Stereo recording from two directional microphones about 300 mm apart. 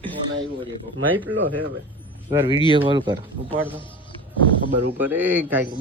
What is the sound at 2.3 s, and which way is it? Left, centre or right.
Speech, centre.